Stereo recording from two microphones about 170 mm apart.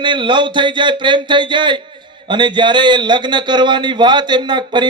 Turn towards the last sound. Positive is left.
turn(degrees=-25)  # may be behind; listen again after turning